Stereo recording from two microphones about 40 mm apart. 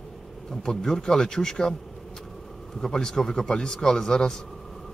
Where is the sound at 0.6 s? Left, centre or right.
Centre.